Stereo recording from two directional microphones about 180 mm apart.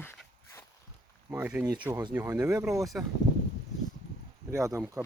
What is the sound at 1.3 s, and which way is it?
Speech, 10° right (ahead or behind).